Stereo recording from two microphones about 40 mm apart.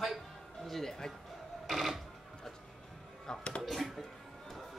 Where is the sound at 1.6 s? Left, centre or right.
Centre.